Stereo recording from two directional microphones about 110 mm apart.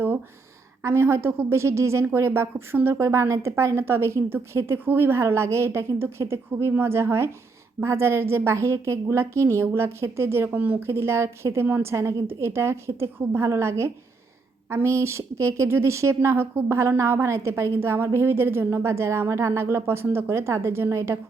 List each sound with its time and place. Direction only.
0.8 s a woman's voice: 20° right (ahead or behind)